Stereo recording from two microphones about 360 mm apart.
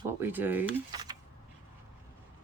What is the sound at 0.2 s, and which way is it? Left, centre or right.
Speech, centre.